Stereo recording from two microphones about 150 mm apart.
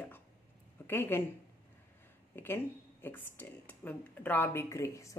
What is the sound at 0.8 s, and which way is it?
Speech, 15° left (ahead or behind).